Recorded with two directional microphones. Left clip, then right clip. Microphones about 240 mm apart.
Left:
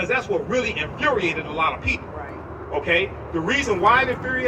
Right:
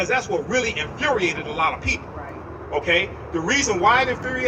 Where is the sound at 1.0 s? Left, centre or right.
Right.